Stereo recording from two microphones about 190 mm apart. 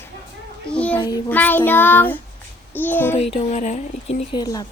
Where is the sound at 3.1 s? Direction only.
35° left (ahead or behind).